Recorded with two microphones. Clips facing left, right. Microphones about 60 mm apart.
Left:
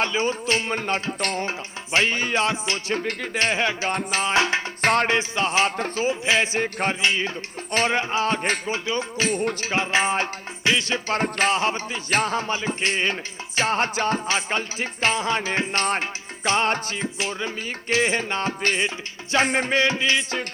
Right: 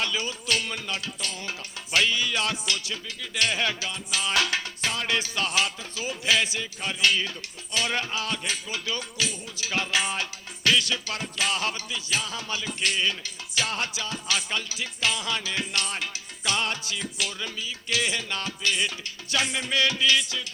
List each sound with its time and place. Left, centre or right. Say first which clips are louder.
0.0 s music: left 7 dB; left
1.2 s music: left 10 dB; left
1.5 s music: left 5 dB; left
3.0 s music: left 11 dB; left
3.3 s music: left 3 dB; left
3.8 s music: left 7 dB; left
4.8 s music: left 14 dB; left
5.0 s music: left 5 dB; left
6.6 s music: left 9 dB; left
7.0 s speech: right 2 dB; left
7.7 s music: left 6 dB; left
7.9 s music: left 7 dB; left
9.3 s music: left 16 dB; left
9.6 s music: left 5 dB; left